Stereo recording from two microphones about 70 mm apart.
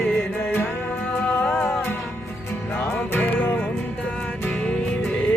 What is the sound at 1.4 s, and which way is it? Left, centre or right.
Music, centre.